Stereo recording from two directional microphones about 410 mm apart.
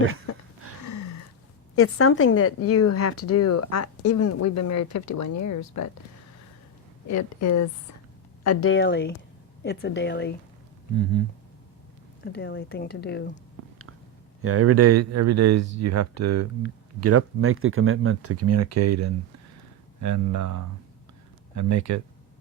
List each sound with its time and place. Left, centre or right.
0.3 s a sound: left
1.7 s speech: left
7.1 s speech: left
8.4 s speech: left
10.9 s speech: right
12.2 s speech: left
14.4 s speech: right